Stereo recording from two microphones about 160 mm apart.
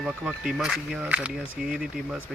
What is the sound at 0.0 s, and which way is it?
Speech, 5° right (ahead or behind).